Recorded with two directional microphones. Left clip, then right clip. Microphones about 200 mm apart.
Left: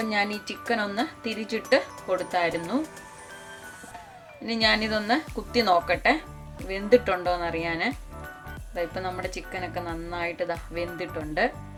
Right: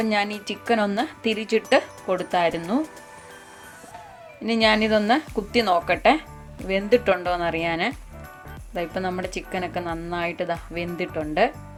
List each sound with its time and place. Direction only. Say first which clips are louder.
0.0 s speech: right 3 dB; 45° right (ahead or behind)
4.4 s speech: right 4 dB; 40° right (ahead or behind)